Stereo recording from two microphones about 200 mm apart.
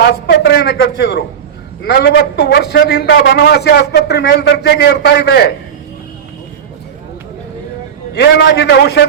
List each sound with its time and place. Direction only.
0.0 s a man's voice: 55° left (ahead or behind)
8.1 s a man's voice: 55° left (ahead or behind)